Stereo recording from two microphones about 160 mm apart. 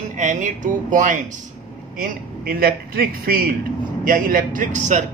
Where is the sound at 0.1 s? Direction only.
50° right (ahead or behind).